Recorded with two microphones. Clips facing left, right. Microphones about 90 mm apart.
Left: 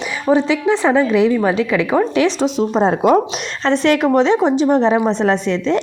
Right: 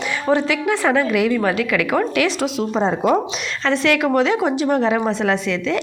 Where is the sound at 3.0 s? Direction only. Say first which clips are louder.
Left 4 dB; 75° left (ahead or behind).